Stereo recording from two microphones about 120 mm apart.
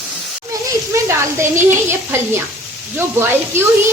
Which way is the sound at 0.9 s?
20° right (ahead or behind).